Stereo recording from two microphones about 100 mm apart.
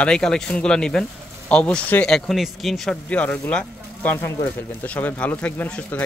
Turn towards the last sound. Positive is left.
turn(degrees=15)  # may be behind; listen again after turning